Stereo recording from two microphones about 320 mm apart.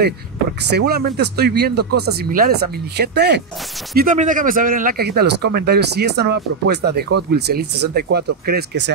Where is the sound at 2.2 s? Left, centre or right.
Right.